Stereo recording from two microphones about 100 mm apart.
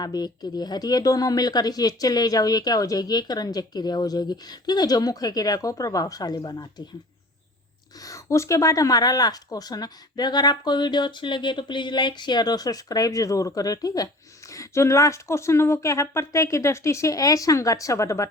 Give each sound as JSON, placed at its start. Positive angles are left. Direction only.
{"t": 0.0, "sound": "speech", "side_deg": 45}
{"t": 7.9, "sound": "speech", "side_deg": 35}